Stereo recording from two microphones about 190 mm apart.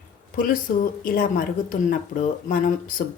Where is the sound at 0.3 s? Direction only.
45° left (ahead or behind).